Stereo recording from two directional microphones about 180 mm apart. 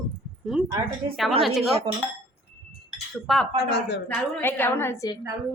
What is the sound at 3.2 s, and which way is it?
Speech, centre (ahead or behind).